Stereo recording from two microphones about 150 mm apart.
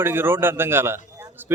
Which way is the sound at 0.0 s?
15° right (ahead or behind).